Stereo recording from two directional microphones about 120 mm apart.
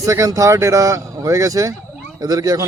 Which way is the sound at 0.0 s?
25° right (ahead or behind).